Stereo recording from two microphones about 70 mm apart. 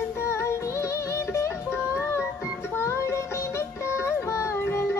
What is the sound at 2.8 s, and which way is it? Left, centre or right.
Music, left.